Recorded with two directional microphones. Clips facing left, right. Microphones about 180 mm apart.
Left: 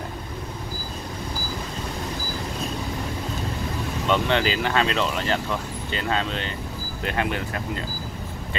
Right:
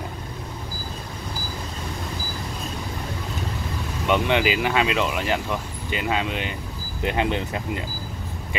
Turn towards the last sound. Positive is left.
turn(degrees=-20)  # may be behind; listen again after turning